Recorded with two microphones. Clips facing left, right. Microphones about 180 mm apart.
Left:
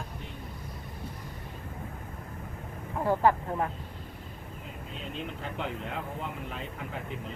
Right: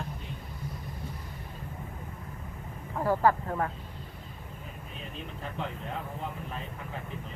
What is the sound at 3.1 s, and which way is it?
Speech, 20° left (ahead or behind).